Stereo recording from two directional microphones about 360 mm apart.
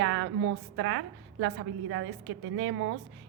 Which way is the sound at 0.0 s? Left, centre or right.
Right.